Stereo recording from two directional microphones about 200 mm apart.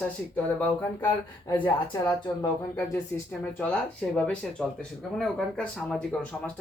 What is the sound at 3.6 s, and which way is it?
Speech, 5° left (ahead or behind).